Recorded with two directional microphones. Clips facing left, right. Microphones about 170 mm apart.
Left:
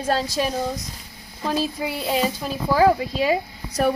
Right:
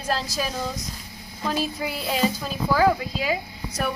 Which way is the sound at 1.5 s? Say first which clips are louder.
Left 3 dB; 25° left (ahead or behind).